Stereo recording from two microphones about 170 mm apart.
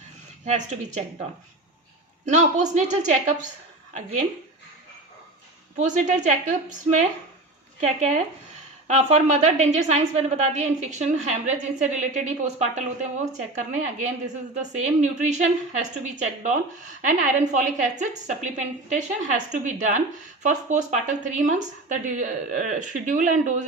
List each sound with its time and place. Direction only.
0.4 s a woman's voice: 45° right (ahead or behind)
2.2 s a woman's voice: 45° right (ahead or behind)
5.8 s a woman's voice: 45° right (ahead or behind)
7.8 s a woman's voice: 40° right (ahead or behind)